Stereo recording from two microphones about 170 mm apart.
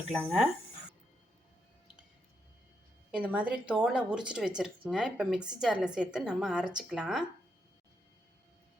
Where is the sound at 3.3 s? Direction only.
5° right (ahead or behind).